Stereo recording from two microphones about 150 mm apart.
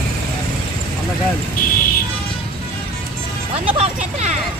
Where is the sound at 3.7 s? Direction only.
50° right (ahead or behind).